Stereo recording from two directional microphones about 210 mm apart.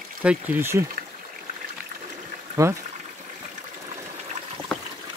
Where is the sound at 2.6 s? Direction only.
15° right (ahead or behind).